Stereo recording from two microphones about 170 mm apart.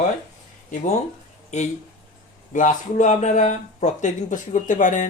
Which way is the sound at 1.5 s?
40° left (ahead or behind).